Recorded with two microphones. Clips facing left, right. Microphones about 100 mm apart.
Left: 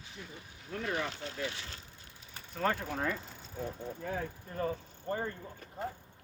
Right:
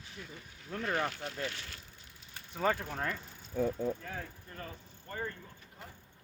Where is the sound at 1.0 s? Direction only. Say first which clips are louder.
Right 1 dB; 25° left (ahead or behind).